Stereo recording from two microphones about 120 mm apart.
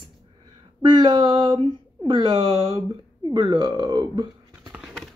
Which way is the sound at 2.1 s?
40° right (ahead or behind).